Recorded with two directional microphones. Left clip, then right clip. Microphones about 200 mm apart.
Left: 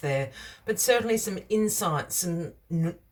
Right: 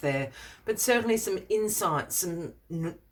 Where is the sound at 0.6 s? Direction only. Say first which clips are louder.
Left 2 dB; 20° right (ahead or behind).